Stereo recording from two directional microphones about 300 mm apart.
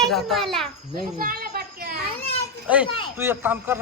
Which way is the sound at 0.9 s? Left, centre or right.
Right.